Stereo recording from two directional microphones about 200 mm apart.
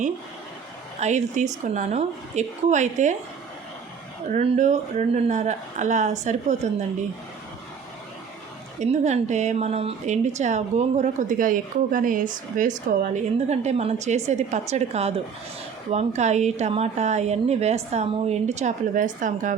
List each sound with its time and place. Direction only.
0.9 s a woman's voice: 35° right (ahead or behind)
4.3 s a woman's voice: 35° right (ahead or behind)
8.8 s a woman's voice: 35° right (ahead or behind)